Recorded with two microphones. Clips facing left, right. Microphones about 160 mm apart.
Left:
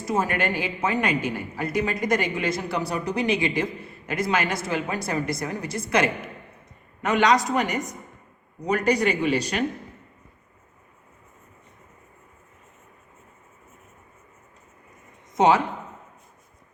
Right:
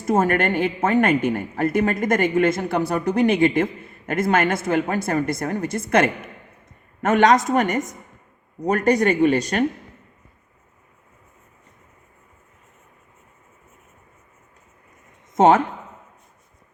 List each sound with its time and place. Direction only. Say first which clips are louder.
0.0 s a woman's voice: right 6 dB; 50° right (ahead or behind)
15.4 s a woman's voice: right 4 dB; 50° right (ahead or behind)